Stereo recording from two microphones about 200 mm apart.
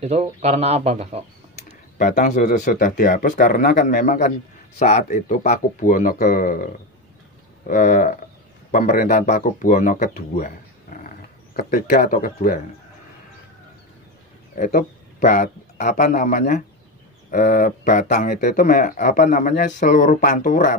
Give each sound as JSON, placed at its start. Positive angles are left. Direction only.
{"t": 0.0, "sound": "speech", "side_deg": -30}
{"t": 2.0, "sound": "speech", "side_deg": 40}
{"t": 14.6, "sound": "speech", "side_deg": 45}